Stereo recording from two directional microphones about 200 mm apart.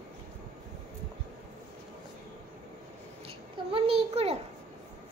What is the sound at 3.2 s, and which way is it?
A child's voice, 30° right (ahead or behind).